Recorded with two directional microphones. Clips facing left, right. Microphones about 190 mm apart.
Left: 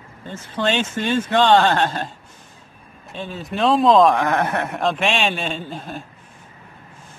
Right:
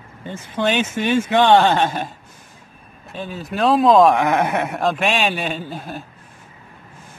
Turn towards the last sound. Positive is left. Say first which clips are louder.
# right 1 dB
turn(degrees=-5)  # may be behind; listen again after turning